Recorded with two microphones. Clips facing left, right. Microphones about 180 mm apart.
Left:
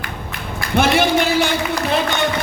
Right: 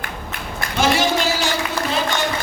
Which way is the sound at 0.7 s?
60° left (ahead or behind).